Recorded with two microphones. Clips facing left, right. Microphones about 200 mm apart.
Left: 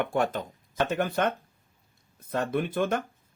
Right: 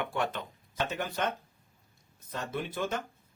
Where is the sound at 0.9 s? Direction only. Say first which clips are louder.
Left 7 dB; 55° left (ahead or behind).